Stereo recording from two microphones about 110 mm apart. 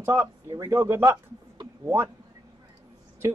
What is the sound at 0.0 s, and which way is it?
Speech, 25° right (ahead or behind).